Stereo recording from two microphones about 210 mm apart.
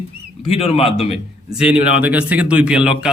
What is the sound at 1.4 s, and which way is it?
A man's voice, 5° right (ahead or behind).